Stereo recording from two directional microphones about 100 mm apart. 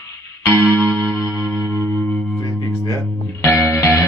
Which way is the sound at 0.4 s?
25° left (ahead or behind).